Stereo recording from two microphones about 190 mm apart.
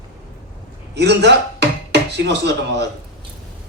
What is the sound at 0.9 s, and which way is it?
Speech, 65° right (ahead or behind).